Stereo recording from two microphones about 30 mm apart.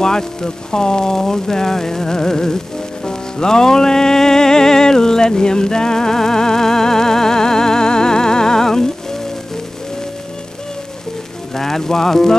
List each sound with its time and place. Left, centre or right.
0.0 s speech: left
3.1 s music: left
11.5 s speech: centre